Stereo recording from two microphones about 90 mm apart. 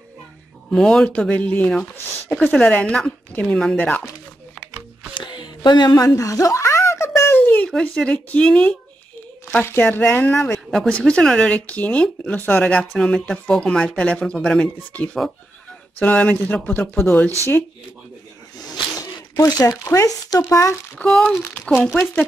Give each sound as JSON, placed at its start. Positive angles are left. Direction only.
{"t": 0.7, "sound": "speech", "side_deg": 10}
{"t": 5.1, "sound": "a sound", "side_deg": 60}
{"t": 6.0, "sound": "a sound", "side_deg": 40}
{"t": 7.7, "sound": "speech", "side_deg": 10}
{"t": 9.5, "sound": "speech", "side_deg": 20}
{"t": 10.9, "sound": "speech", "side_deg": 10}
{"t": 16.0, "sound": "speech", "side_deg": 15}
{"t": 18.6, "sound": "a sound", "side_deg": 45}
{"t": 21.0, "sound": "speech", "side_deg": 10}
{"t": 21.4, "sound": "speech", "side_deg": 25}
{"t": 21.6, "sound": "speech", "side_deg": 10}